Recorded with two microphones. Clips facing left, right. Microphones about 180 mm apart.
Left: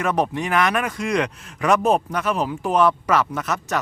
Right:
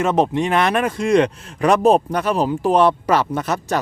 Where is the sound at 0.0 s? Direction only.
25° right (ahead or behind).